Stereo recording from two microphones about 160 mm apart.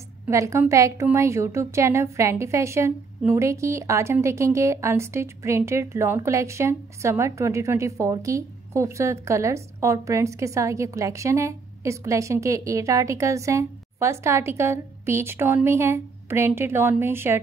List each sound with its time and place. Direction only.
0.3 s a woman's voice: 20° right (ahead or behind)